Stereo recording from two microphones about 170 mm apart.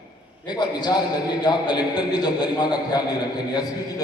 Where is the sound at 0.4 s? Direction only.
25° left (ahead or behind).